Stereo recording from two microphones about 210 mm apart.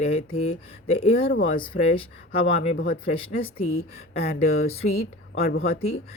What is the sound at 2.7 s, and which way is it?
Speech, 45° left (ahead or behind).